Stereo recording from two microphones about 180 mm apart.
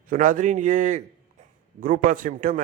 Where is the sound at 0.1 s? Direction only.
45° right (ahead or behind).